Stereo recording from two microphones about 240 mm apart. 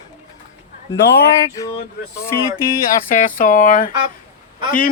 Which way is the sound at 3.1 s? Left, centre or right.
Left.